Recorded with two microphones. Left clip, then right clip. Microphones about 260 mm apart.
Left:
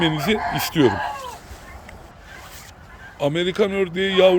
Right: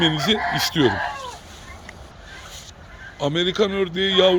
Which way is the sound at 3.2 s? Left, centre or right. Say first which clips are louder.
Even; centre.